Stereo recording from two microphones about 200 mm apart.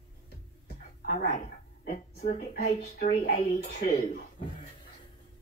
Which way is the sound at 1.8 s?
30° left (ahead or behind).